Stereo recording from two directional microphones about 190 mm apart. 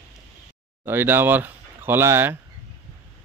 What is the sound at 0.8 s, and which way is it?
Speech, 10° right (ahead or behind).